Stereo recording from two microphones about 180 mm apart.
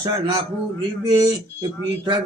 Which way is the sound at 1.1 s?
20° right (ahead or behind).